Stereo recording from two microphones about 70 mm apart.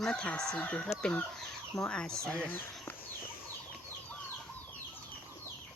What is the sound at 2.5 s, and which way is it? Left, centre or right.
Speech, left.